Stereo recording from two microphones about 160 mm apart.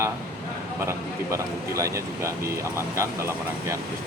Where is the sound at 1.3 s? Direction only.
20° right (ahead or behind).